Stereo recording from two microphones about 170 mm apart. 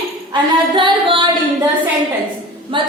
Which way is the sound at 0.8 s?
30° right (ahead or behind).